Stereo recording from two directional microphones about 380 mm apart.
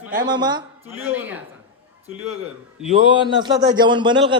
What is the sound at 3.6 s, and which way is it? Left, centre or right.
Speech, centre.